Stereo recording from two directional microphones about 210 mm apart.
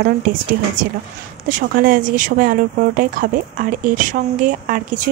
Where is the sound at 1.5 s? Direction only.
40° right (ahead or behind).